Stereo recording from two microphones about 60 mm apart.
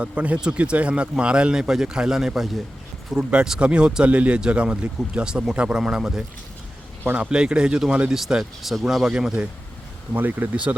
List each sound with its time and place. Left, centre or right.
0.0 s speech: right
10.2 s speech: right
10.5 s speech: right